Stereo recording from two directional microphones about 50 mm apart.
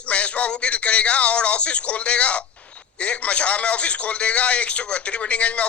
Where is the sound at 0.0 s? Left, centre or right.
Left.